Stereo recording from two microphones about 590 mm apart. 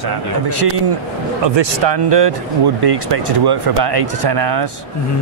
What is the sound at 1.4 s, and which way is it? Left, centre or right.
Speech, right.